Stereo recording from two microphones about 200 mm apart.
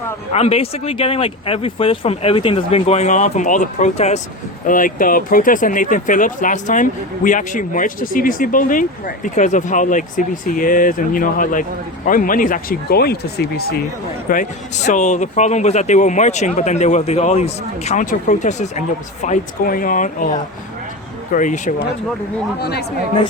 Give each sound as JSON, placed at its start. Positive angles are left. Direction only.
{"t": 0.3, "sound": "speech", "side_deg": 30}
{"t": 14.3, "sound": "speech", "side_deg": 40}